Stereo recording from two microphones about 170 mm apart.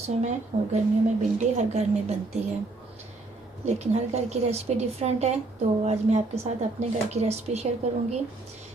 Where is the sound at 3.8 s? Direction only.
40° right (ahead or behind).